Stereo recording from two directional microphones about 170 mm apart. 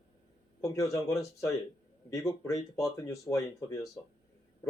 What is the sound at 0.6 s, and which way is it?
Speech, 20° left (ahead or behind).